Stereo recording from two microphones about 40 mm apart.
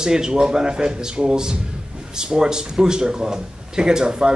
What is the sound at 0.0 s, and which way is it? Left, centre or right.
Speech, centre.